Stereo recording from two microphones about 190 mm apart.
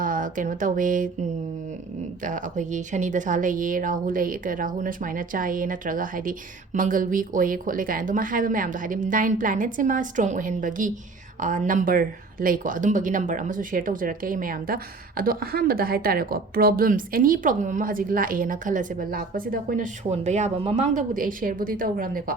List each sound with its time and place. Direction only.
0.0 s speech: 45° right (ahead or behind)
2.2 s speech: 45° right (ahead or behind)